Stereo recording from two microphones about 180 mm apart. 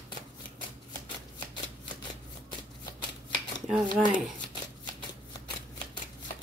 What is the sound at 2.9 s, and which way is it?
Shuffling cards, 25° left (ahead or behind).